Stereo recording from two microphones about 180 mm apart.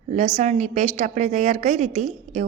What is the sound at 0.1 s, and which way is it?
A woman's voice, 40° right (ahead or behind).